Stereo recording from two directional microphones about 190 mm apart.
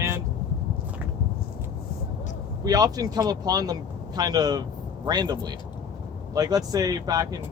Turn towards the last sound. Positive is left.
turn(degrees=-20)  # may be behind; listen again after turning